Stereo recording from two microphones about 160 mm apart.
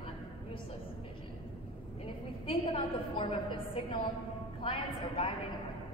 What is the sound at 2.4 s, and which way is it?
A woman's voice, 35° left (ahead or behind).